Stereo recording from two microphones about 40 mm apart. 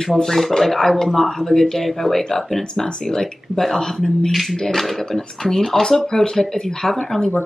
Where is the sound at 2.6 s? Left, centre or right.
Centre.